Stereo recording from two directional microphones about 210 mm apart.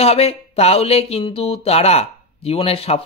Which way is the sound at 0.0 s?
30° left (ahead or behind).